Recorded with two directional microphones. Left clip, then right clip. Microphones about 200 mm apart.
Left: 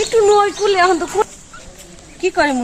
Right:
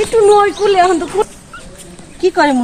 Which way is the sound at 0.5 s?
15° left (ahead or behind).